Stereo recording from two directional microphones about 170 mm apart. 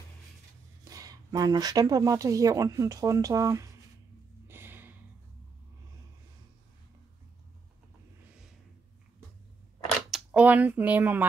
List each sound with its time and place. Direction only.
0.8 s speech: 20° right (ahead or behind)
4.5 s a sound: 15° right (ahead or behind)
10.1 s speech: 10° right (ahead or behind)